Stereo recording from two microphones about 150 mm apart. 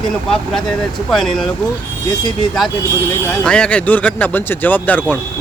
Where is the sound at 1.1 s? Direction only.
Centre (ahead or behind).